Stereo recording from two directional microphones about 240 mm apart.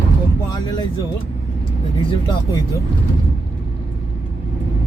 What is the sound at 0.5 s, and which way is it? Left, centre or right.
Speech, centre.